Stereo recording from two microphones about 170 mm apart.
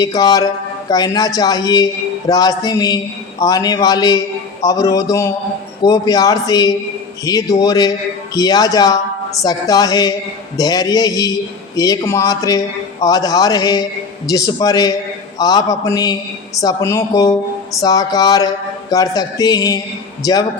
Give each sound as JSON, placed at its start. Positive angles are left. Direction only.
{"t": 0.0, "sound": "speech", "side_deg": 20}